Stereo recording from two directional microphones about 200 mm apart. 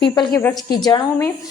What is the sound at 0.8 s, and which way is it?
Speech, 20° left (ahead or behind).